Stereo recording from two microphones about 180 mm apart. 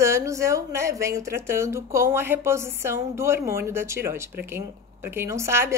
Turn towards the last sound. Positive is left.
turn(degrees=-15)  # may be behind; listen again after turning